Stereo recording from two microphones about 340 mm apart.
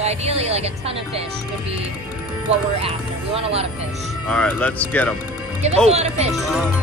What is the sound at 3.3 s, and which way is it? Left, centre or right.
Speech, centre.